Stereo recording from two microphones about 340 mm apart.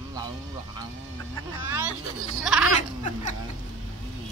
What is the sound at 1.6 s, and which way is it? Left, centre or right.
Speech, centre.